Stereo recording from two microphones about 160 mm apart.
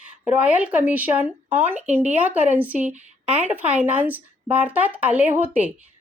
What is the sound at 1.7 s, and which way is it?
Speech, 45° right (ahead or behind).